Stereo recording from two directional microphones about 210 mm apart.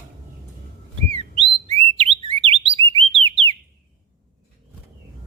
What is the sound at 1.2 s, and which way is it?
Bird, 30° right (ahead or behind).